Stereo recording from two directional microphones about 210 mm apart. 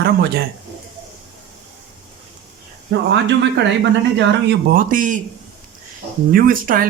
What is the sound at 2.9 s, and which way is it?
Speech, 55° right (ahead or behind).